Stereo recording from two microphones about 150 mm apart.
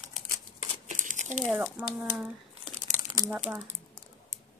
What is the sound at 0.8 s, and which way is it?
Crumpling, 55° right (ahead or behind).